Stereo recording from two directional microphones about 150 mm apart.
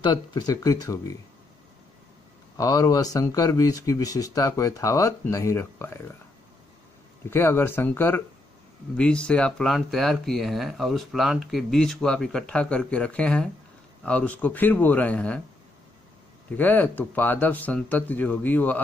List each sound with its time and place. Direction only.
0.0 s speech: 30° left (ahead or behind)
2.5 s speech: 25° left (ahead or behind)
7.2 s speech: 15° left (ahead or behind)
16.5 s speech: 10° left (ahead or behind)